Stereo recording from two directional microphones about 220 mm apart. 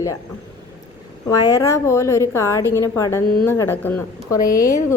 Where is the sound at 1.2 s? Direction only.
15° left (ahead or behind).